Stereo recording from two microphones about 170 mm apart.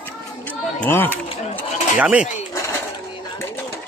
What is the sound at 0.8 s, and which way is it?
Fowl, 10° left (ahead or behind).